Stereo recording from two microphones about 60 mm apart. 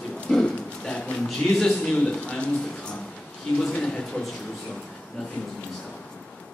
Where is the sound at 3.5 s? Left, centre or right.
Centre.